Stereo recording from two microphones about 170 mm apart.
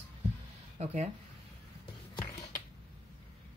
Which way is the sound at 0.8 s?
40° right (ahead or behind).